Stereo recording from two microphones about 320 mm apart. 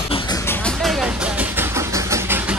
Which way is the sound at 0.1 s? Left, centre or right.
Centre.